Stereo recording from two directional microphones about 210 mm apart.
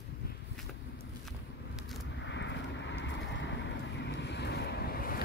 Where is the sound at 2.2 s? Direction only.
60° left (ahead or behind).